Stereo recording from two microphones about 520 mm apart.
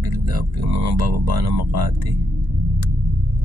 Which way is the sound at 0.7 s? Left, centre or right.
Right.